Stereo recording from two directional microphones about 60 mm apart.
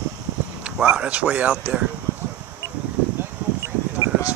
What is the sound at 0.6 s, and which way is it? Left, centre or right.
Speech, centre.